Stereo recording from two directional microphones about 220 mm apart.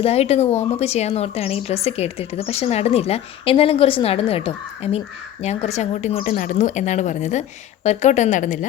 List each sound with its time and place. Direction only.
0.0 s a woman's voice: 30° left (ahead or behind)